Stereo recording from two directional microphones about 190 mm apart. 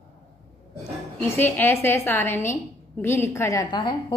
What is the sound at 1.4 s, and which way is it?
A woman's voice, 10° left (ahead or behind).